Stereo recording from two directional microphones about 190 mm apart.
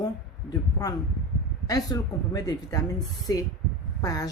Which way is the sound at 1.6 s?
20° left (ahead or behind).